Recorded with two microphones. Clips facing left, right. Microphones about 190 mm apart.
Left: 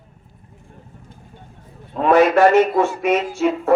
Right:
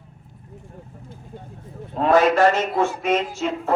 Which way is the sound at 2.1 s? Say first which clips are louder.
Left 4 dB; 60° left (ahead or behind).